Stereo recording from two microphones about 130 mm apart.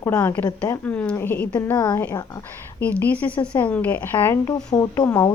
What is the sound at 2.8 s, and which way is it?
Speech, 15° left (ahead or behind).